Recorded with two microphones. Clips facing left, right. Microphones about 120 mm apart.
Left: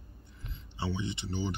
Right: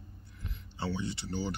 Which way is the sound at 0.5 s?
20° left (ahead or behind).